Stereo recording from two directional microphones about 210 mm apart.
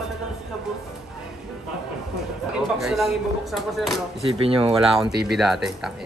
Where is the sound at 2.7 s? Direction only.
Centre (ahead or behind).